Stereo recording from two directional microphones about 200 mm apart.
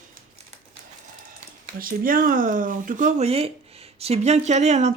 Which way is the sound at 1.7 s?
45° right (ahead or behind).